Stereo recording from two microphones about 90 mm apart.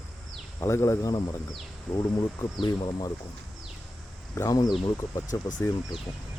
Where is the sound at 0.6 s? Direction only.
30° left (ahead or behind).